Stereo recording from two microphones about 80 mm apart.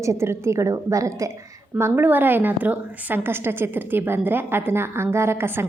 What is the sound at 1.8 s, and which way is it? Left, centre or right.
A woman's voice, right.